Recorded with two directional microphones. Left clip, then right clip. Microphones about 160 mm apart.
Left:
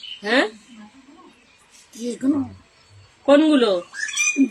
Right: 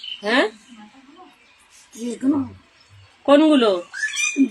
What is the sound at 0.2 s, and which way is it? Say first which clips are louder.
Speech: even; 25° left (ahead or behind).